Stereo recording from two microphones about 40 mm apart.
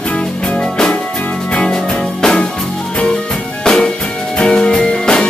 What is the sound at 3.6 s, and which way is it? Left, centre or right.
Music, left.